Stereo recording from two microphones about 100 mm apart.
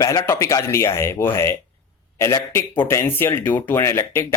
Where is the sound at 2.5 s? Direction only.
20° left (ahead or behind).